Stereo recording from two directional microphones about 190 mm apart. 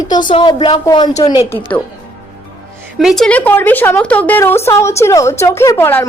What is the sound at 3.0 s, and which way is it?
A woman's voice, centre (ahead or behind).